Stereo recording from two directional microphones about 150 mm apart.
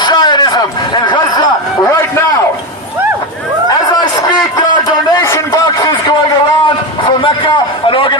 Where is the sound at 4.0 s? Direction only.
30° left (ahead or behind).